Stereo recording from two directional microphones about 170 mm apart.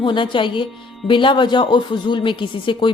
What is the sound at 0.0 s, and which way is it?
A woman's voice, 30° left (ahead or behind).